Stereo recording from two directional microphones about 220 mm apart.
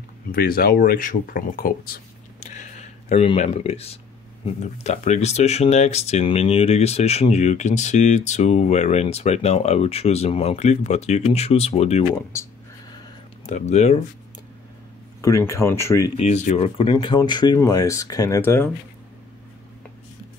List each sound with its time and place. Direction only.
0.3 s speech: 40° left (ahead or behind)
13.5 s speech: 30° left (ahead or behind)
15.2 s speech: 15° left (ahead or behind)
16.2 s speech: 30° left (ahead or behind); by 18.7 s 10° left (ahead or behind)